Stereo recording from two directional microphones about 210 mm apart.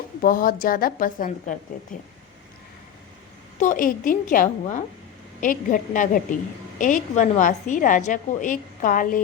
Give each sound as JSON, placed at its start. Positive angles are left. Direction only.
{"t": 0.2, "sound": "a woman's voice", "side_deg": 40}
{"t": 3.6, "sound": "a woman's voice", "side_deg": 40}